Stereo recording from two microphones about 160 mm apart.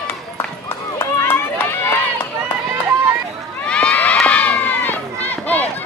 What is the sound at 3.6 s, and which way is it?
Run, 10° left (ahead or behind).